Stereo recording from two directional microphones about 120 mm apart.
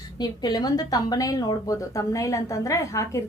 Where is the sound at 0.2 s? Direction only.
35° left (ahead or behind).